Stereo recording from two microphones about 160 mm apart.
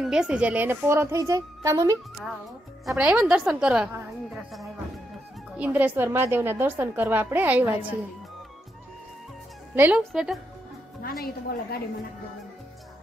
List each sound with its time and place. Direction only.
0.0 s a woman's voice: 5° right (ahead or behind); by 2.0 s 20° right (ahead or behind)
2.8 s a woman's voice: 5° right (ahead or behind)
9.8 s a woman's voice: 10° right (ahead or behind)
11.0 s a woman's voice: 70° left (ahead or behind)